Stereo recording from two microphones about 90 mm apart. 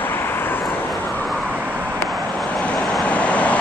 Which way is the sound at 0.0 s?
25° left (ahead or behind).